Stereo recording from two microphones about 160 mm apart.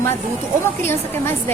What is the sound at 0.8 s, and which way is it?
Speech, 15° left (ahead or behind).